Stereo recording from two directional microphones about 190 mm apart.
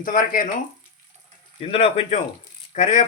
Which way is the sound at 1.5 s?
30° left (ahead or behind).